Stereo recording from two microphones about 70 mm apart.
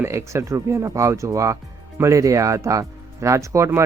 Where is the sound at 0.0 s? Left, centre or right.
Right.